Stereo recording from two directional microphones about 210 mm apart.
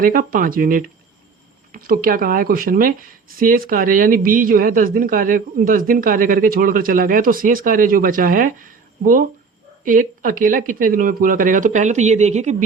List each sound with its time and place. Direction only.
0.0 s speech: 40° right (ahead or behind)